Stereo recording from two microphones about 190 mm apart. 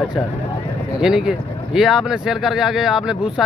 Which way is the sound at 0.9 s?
5° right (ahead or behind).